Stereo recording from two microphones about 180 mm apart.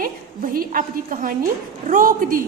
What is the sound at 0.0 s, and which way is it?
A woman's voice, 50° right (ahead or behind).